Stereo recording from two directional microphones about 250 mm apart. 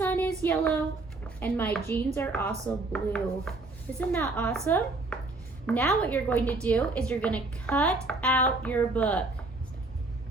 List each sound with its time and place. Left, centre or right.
0.0 s child singing: centre
1.4 s a woman's voice: centre